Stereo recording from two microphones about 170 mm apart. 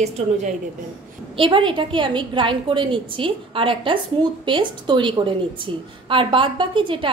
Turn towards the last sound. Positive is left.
turn(degrees=-30)  # may be behind; listen again after turning